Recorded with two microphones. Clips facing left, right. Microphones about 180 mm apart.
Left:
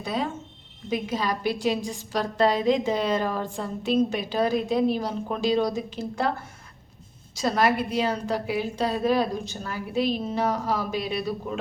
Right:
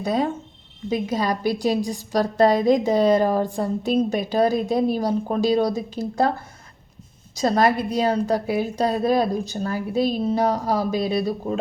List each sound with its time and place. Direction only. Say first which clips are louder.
0.0 s a woman's voice: right 6 dB; 40° right (ahead or behind)
7.3 s a woman's voice: right 4 dB; 40° right (ahead or behind)